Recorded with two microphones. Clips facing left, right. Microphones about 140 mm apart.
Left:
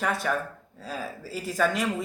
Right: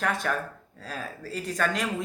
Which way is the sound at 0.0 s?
Centre (ahead or behind).